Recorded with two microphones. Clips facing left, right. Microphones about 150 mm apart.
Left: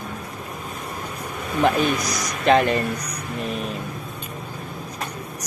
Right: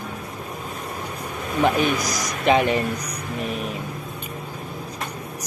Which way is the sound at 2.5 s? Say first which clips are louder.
Left 1 dB; 5° right (ahead or behind).